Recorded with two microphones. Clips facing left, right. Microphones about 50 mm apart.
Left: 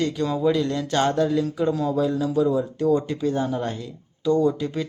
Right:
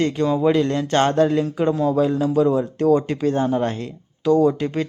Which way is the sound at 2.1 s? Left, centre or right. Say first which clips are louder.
Right 3 dB; right.